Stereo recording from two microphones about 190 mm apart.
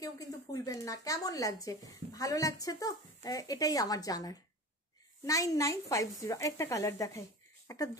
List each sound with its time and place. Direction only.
0.0 s speech: 15° left (ahead or behind)